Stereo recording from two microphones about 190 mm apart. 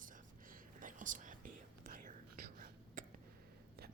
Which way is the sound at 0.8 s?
45° right (ahead or behind).